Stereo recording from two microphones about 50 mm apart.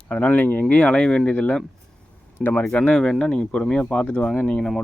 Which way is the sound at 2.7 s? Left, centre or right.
Centre.